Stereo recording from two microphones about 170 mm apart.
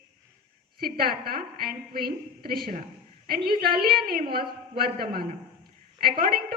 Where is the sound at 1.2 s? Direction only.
60° right (ahead or behind).